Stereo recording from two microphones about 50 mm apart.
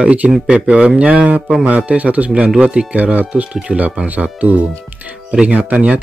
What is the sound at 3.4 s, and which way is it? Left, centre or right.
Humming, centre.